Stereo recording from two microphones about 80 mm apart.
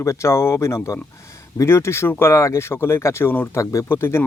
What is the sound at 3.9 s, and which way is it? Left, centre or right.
Speech, left.